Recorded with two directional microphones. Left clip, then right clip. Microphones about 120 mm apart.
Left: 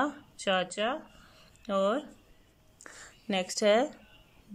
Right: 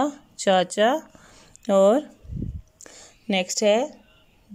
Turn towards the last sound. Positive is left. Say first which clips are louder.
# right 5 dB
turn(degrees=-10)  # may be behind; listen again after turning